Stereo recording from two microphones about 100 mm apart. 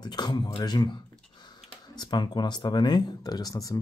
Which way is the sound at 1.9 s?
45° left (ahead or behind).